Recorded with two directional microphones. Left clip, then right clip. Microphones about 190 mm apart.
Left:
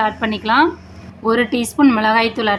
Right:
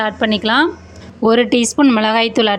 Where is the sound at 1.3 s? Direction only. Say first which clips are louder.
Right 4 dB; 40° right (ahead or behind).